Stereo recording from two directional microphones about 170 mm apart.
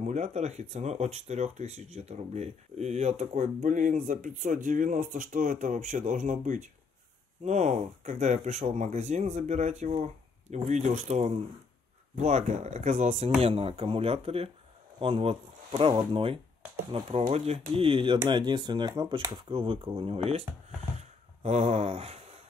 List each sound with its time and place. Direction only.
0.0 s speech: 45° right (ahead or behind)